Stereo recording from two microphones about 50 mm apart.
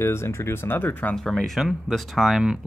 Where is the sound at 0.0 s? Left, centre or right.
Left.